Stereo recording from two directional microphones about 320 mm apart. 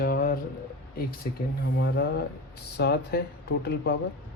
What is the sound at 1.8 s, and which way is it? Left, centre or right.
Speech, left.